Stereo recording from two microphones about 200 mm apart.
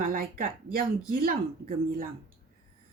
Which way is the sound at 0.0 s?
45° right (ahead or behind).